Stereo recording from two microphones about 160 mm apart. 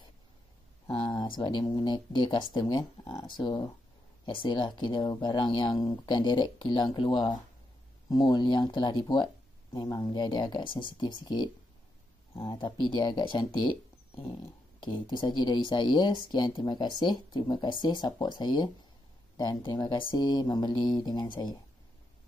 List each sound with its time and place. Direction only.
0.9 s speech: 30° left (ahead or behind)
12.5 s speech: 30° left (ahead or behind)